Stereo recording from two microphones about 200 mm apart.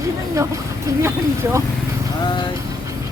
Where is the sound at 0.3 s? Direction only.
15° right (ahead or behind).